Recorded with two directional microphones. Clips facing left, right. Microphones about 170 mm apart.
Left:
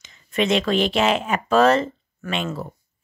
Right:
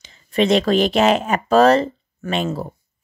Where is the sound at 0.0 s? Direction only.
35° right (ahead or behind).